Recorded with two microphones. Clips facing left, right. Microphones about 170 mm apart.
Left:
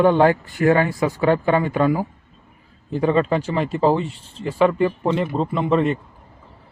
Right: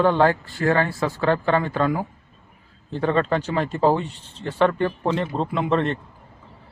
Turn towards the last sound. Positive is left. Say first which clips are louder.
# left 3 dB
turn(degrees=5)  # may be behind; listen again after turning